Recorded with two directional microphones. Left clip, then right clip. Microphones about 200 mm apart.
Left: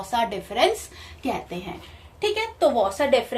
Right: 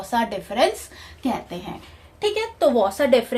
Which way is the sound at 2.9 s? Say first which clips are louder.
Right 3 dB; 60° right (ahead or behind).